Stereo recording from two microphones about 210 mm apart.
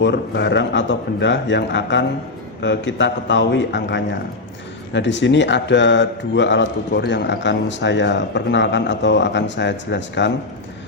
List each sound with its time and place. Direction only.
0.0 s a man's voice: 55° left (ahead or behind)